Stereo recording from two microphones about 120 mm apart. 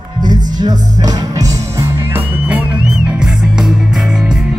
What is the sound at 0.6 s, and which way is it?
Music, 35° right (ahead or behind).